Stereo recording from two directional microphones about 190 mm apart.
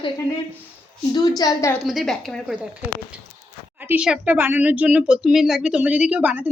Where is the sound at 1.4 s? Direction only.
20° left (ahead or behind).